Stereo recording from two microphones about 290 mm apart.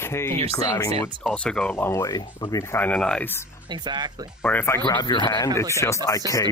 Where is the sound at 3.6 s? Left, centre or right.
Centre.